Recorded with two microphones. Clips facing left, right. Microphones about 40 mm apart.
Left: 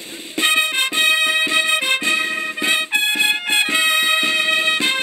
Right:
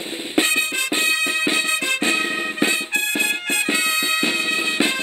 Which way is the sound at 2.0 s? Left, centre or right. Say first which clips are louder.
Left 1 dB; right.